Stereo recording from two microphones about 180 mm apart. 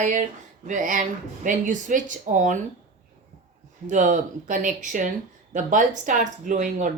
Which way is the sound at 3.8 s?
45° right (ahead or behind).